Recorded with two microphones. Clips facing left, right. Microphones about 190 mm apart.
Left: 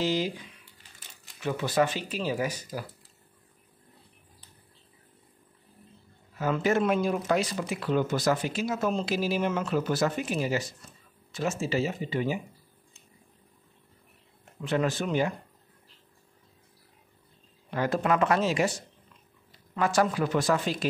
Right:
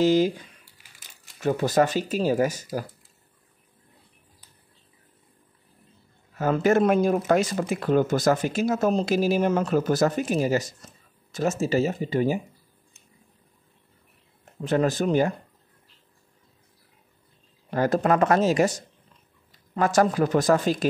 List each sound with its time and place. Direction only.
0.0 s speech: 45° right (ahead or behind)
6.3 s speech: 45° right (ahead or behind)
14.6 s speech: 40° right (ahead or behind)
17.6 s speech: 40° right (ahead or behind)